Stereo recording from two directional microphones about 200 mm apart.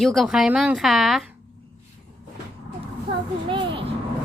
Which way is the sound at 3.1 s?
25° right (ahead or behind).